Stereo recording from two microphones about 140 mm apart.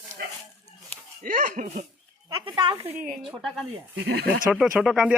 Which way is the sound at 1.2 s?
70° right (ahead or behind).